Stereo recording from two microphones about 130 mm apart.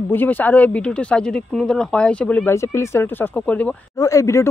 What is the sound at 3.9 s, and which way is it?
Speech, 25° left (ahead or behind).